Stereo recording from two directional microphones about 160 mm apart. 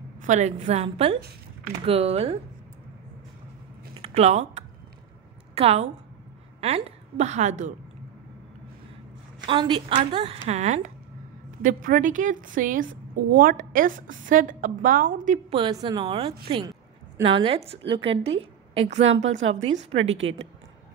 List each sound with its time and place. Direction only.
0.2 s a woman's voice: 45° right (ahead or behind)
3.9 s a sound: 40° right (ahead or behind)
5.5 s a woman's voice: 40° right (ahead or behind)
9.5 s a woman's voice: 30° right (ahead or behind)
10.4 s a woman's voice: 45° right (ahead or behind)
11.6 s a woman's voice: 55° right (ahead or behind)
15.5 s a woman's voice: 30° right (ahead or behind)